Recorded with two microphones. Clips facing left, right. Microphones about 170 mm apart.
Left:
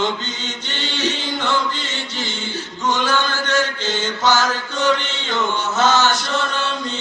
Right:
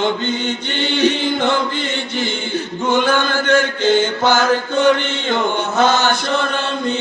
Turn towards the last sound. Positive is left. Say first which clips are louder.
# right 2 dB
turn(degrees=-55)  # may be behind; listen again after turning